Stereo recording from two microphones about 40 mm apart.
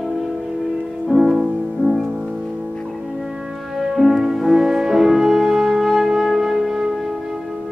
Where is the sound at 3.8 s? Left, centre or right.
Centre.